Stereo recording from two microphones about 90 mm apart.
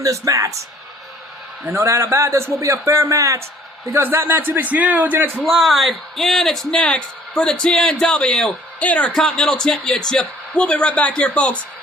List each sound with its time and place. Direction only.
0.0 s a man's voice: 35° right (ahead or behind)
1.6 s a man's voice: 30° right (ahead or behind)
5.5 s speech: centre (ahead or behind); by 9.1 s 15° left (ahead or behind)
9.1 s speech: 5° left (ahead or behind)